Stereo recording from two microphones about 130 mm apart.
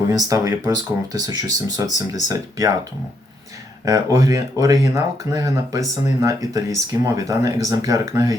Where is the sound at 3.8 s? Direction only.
25° right (ahead or behind).